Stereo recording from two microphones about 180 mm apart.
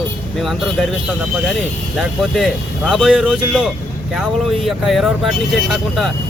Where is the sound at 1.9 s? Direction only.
Centre (ahead or behind).